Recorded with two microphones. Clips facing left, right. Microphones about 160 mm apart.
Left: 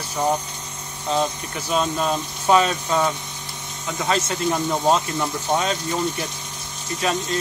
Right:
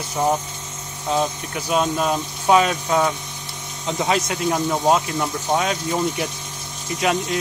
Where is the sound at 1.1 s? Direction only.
10° right (ahead or behind).